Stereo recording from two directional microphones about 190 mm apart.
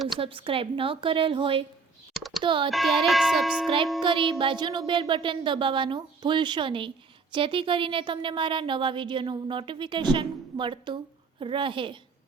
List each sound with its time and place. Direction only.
0.2 s a child's voice: 30° right (ahead or behind)
2.6 s music: centre (ahead or behind)
4.0 s speech: 25° right (ahead or behind)